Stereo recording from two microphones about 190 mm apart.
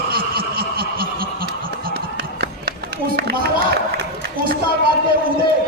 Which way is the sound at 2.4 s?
60° right (ahead or behind).